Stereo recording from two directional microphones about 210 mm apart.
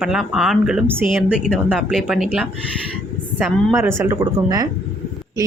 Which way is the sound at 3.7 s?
10° right (ahead or behind).